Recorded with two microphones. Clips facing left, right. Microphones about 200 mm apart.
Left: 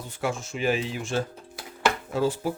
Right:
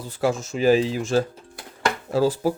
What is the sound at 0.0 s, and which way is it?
Speech, 35° right (ahead or behind).